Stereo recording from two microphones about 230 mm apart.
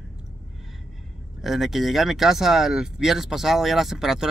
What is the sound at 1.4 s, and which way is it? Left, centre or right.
Speech, centre.